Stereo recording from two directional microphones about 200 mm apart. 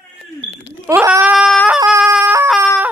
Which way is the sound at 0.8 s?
15° right (ahead or behind).